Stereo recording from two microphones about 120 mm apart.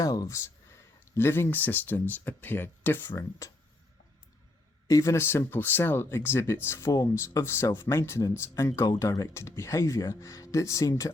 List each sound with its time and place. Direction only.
0.0 s speech: 30° left (ahead or behind)
4.9 s speech: 25° left (ahead or behind)